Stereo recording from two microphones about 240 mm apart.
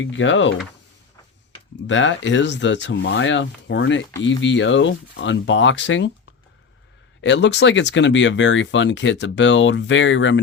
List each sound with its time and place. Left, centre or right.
0.0 s speech: left
1.9 s speech: left
7.2 s speech: left